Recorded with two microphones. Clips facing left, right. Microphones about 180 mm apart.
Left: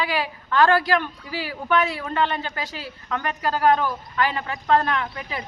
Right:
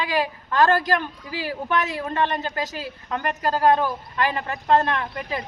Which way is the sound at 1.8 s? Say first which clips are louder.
Left 1 dB; 40° right (ahead or behind).